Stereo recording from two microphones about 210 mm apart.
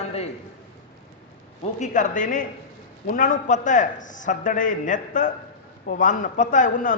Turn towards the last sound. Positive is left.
turn(degrees=40)  # may be behind; listen again after turning